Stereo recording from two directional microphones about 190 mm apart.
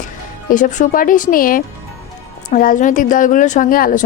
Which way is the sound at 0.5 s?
40° left (ahead or behind).